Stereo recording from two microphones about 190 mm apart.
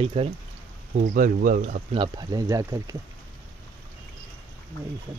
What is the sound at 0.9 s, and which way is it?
Speech, 45° right (ahead or behind).